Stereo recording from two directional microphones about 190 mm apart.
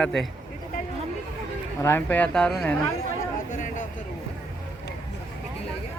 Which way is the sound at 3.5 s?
45° left (ahead or behind).